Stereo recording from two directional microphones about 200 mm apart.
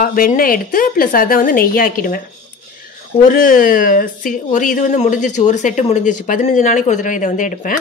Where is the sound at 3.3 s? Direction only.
45° left (ahead or behind).